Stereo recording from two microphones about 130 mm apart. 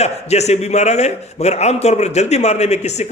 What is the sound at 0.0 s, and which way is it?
A man's voice, 55° left (ahead or behind).